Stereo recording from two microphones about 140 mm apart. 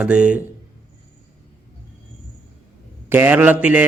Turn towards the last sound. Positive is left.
turn(degrees=-10)  # may be behind; listen again after turning